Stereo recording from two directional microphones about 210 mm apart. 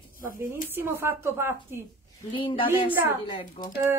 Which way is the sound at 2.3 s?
25° left (ahead or behind).